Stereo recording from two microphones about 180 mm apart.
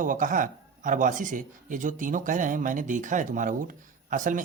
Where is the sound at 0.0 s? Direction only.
50° right (ahead or behind).